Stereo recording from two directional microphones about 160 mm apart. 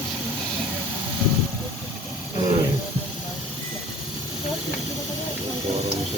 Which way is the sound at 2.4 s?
25° right (ahead or behind).